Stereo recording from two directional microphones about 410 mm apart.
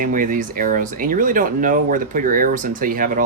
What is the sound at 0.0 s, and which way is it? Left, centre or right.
Speech, centre.